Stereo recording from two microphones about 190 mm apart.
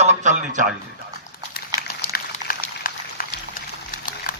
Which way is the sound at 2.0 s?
50° left (ahead or behind).